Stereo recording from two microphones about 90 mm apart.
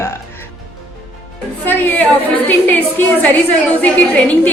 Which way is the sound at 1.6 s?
20° left (ahead or behind).